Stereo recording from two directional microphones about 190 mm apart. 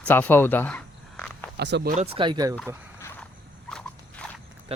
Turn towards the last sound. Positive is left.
turn(degrees=-30)  # may be behind; listen again after turning